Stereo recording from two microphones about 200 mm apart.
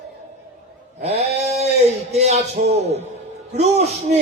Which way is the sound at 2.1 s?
35° right (ahead or behind).